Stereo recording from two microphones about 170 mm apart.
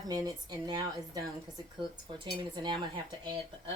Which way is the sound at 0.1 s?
20° right (ahead or behind).